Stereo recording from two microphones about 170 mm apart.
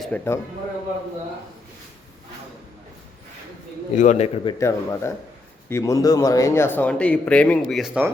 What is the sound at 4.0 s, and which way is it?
Speech, 40° left (ahead or behind).